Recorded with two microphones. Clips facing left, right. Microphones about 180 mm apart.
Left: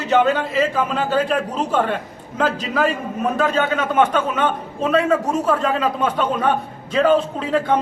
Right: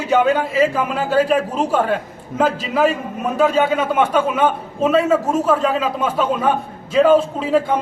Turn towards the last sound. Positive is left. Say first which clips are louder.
# right 2 dB
turn(degrees=-5)  # may be behind; listen again after turning